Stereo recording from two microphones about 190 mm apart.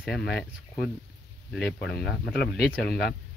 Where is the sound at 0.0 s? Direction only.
55° left (ahead or behind).